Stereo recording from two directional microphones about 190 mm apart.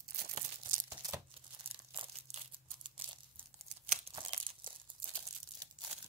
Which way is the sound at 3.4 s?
30° right (ahead or behind).